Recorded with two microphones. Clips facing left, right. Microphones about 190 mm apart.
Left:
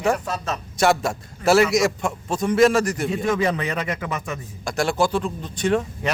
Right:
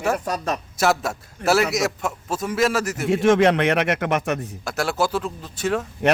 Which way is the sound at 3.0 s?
80° right.